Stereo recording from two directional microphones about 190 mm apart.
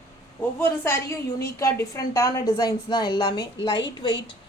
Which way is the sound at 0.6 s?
15° left (ahead or behind).